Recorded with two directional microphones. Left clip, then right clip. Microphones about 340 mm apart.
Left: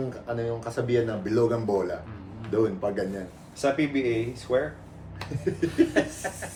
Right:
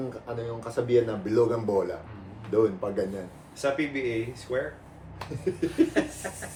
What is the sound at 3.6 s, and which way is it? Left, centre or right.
Speech, centre.